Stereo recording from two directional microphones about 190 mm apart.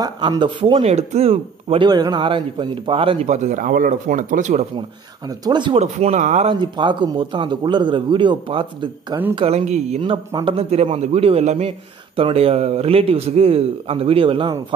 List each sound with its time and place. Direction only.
0.0 s speech: 20° right (ahead or behind); by 4.6 s 40° right (ahead or behind)
5.4 s speech: 25° right (ahead or behind)
5.8 s a man's voice: 35° right (ahead or behind)